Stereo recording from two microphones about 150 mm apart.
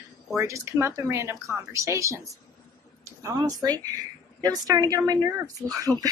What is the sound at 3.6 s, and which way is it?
Speech, 25° right (ahead or behind).